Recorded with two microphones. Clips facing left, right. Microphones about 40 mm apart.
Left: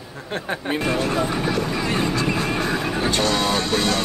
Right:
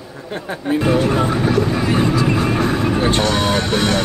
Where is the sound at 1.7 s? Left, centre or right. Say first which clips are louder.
Right 5 dB; right.